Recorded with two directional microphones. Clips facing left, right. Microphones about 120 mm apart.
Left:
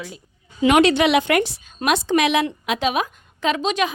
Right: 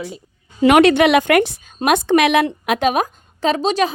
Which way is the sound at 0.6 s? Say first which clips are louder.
Right 4 dB; 60° right (ahead or behind).